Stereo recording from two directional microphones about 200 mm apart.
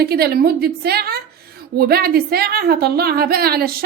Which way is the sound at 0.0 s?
50° right (ahead or behind).